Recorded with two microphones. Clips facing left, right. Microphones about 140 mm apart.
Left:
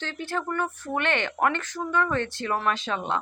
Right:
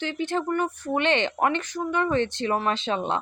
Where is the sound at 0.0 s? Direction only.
20° right (ahead or behind).